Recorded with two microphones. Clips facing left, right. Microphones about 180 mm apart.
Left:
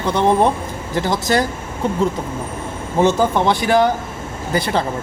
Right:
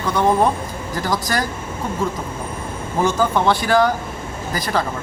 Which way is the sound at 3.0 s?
20° left (ahead or behind).